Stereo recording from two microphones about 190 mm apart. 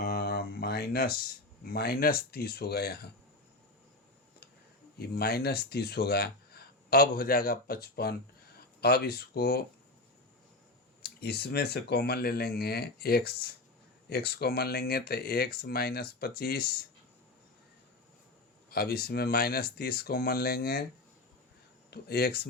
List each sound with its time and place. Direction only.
0.0 s a sound: 55° left (ahead or behind)
1.6 s speech: 55° left (ahead or behind)
4.9 s speech: 55° left (ahead or behind)
11.0 s speech: 55° left (ahead or behind)
18.7 s speech: 55° left (ahead or behind)
21.8 s speech: 55° left (ahead or behind)